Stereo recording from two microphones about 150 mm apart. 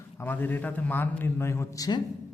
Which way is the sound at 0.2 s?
15° left (ahead or behind).